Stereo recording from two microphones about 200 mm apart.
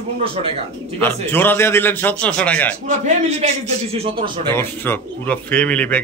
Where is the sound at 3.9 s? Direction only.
30° right (ahead or behind).